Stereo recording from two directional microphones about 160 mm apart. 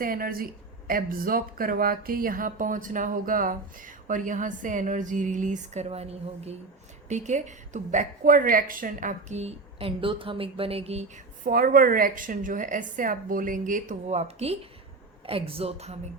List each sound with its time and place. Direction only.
0.0 s a woman's voice: 65° right (ahead or behind); by 11.0 s 40° right (ahead or behind)
11.4 s a woman's voice: 60° right (ahead or behind); by 16.0 s 40° right (ahead or behind)